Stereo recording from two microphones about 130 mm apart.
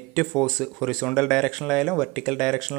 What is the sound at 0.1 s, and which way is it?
Speech, 5° left (ahead or behind).